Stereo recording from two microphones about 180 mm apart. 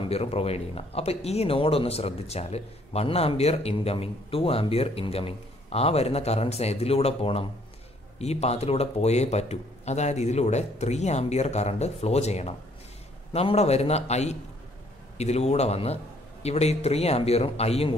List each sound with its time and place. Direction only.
0.0 s speech: 35° left (ahead or behind)